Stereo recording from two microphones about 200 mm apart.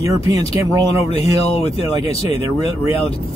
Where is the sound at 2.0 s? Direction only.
30° left (ahead or behind).